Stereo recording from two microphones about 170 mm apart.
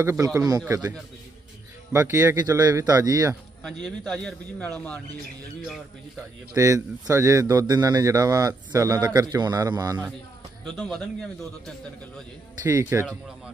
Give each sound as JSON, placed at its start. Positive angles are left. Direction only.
{"t": 0.0, "sound": "a man's voice", "side_deg": -15}
{"t": 1.9, "sound": "a man's voice", "side_deg": -15}
{"t": 3.8, "sound": "speech", "side_deg": 5}
{"t": 6.5, "sound": "a man's voice", "side_deg": -20}
{"t": 10.8, "sound": "speech", "side_deg": 0}
{"t": 12.6, "sound": "speech", "side_deg": -15}